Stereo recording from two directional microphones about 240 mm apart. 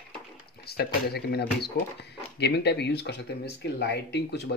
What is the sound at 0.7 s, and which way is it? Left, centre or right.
Speech, left.